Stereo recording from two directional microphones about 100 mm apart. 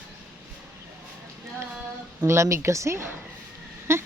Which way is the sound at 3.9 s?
25° right (ahead or behind).